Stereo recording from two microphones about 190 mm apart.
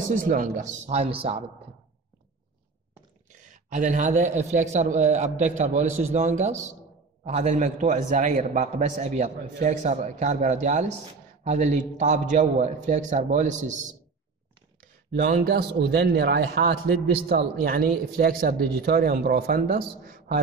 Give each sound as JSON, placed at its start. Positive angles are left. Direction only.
{"t": 0.1, "sound": "a man's voice", "side_deg": -45}
{"t": 3.7, "sound": "a man's voice", "side_deg": -40}
{"t": 15.1, "sound": "a man's voice", "side_deg": -50}